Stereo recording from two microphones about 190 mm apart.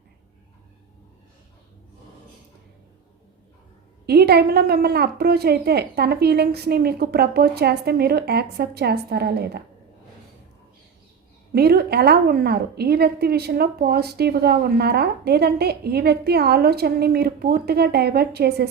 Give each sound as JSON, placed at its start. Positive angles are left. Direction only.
{"t": 4.0, "sound": "a woman's voice", "side_deg": -55}
{"t": 11.5, "sound": "a woman's voice", "side_deg": -55}